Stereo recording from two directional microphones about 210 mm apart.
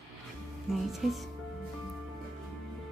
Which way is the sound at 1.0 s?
Centre (ahead or behind).